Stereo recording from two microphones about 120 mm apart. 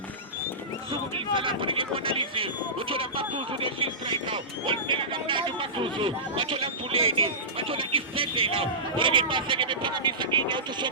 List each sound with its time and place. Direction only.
1.4 s speech: 45° right (ahead or behind)